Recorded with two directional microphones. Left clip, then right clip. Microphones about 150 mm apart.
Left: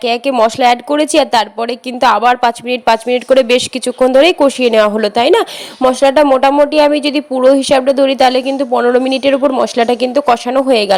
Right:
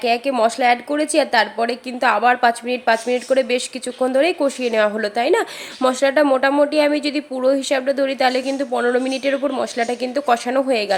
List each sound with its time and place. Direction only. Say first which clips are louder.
0.0 s a woman's voice: left 6 dB; 50° left (ahead or behind)